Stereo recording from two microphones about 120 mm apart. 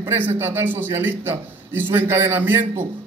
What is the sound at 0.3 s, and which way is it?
A man's voice, 20° right (ahead or behind).